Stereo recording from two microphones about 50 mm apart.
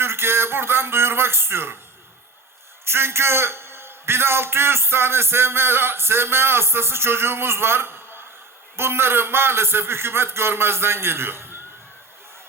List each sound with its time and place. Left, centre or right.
0.0 s speech: right
2.8 s a man's voice: right